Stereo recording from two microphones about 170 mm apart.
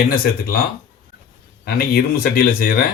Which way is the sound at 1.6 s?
60° left (ahead or behind).